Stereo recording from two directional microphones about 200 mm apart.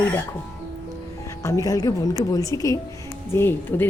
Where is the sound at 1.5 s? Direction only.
15° left (ahead or behind).